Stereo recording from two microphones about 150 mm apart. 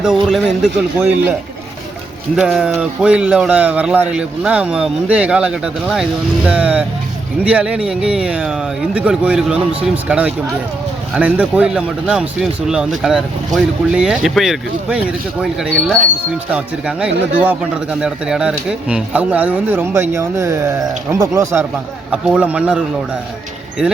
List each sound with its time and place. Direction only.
0.0 s speech: centre (ahead or behind)
2.3 s speech: 5° right (ahead or behind)